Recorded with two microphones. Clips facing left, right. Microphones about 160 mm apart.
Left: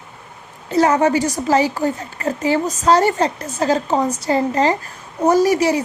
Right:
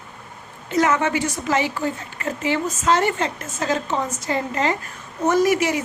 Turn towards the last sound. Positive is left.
turn(degrees=35)  # may be behind; listen again after turning